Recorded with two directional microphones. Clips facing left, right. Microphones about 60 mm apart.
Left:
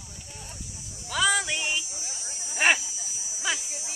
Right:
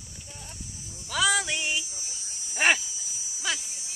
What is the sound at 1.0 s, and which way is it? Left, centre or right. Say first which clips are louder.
Music: even; centre.